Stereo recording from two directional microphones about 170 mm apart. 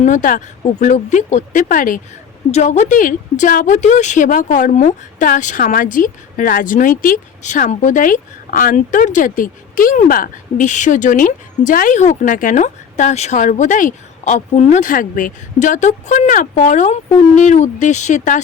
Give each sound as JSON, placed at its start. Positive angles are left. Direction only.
{"t": 0.0, "sound": "a woman's voice", "side_deg": 50}
{"t": 2.5, "sound": "a woman's voice", "side_deg": 40}